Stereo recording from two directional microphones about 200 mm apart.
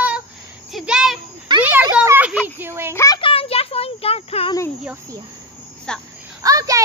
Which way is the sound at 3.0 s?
20° left (ahead or behind).